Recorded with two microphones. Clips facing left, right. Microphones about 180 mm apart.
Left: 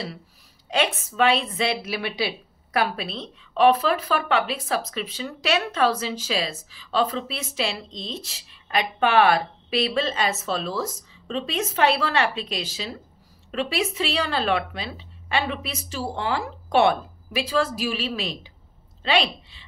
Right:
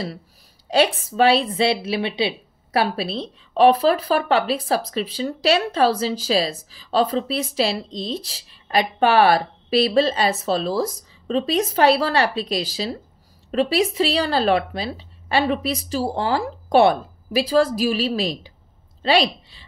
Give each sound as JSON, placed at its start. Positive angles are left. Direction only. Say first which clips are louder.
{"t": 0.7, "sound": "speech", "louder": "right 6 dB", "side_deg": -35}